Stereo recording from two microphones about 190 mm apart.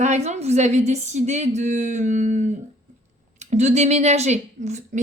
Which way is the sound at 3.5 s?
35° right (ahead or behind).